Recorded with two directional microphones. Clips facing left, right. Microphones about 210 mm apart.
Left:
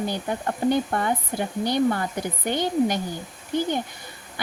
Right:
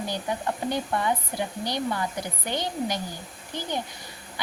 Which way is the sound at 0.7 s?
50° left (ahead or behind).